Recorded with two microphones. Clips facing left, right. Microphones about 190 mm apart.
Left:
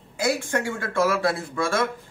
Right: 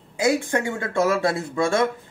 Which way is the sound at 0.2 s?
20° right (ahead or behind).